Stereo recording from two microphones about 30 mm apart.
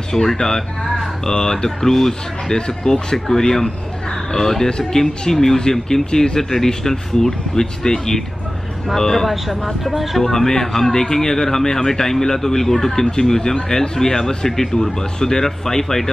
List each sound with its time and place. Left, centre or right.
0.1 s speech: centre
2.5 s speech: left; by 10.3 s centre
10.3 s speech: centre